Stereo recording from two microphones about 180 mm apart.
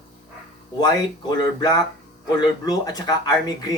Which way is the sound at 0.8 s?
20° left (ahead or behind).